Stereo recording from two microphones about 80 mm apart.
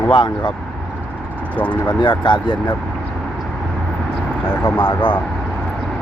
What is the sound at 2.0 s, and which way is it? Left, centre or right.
Speech, left.